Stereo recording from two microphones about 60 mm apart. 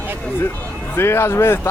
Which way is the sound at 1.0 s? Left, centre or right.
Left.